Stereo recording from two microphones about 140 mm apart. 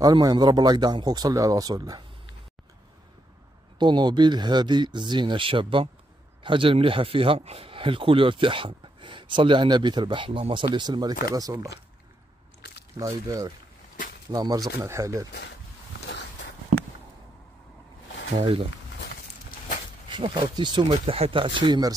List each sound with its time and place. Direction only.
0.0 s speech: 30° right (ahead or behind)
3.7 s speech: 30° right (ahead or behind)
13.0 s speech: 25° right (ahead or behind)
18.4 s speech: 45° right (ahead or behind)
20.1 s speech: 35° right (ahead or behind)
21.0 s speech: 45° right (ahead or behind)